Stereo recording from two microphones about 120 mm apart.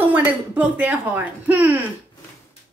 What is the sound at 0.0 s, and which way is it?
Speech, 15° right (ahead or behind).